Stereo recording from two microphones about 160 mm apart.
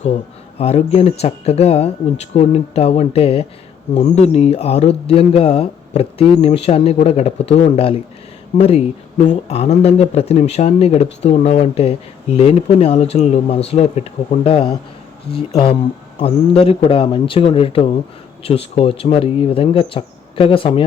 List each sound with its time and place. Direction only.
0.6 s speech: 40° left (ahead or behind)